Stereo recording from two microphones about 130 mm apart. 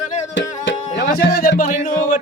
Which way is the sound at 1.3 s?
90° left.